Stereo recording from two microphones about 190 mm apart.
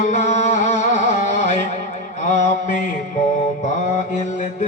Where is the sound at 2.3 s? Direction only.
40° left (ahead or behind).